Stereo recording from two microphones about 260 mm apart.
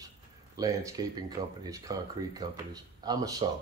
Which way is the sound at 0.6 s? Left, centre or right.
Centre.